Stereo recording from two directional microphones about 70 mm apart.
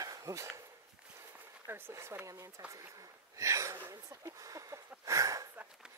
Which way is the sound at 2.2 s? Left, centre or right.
Right.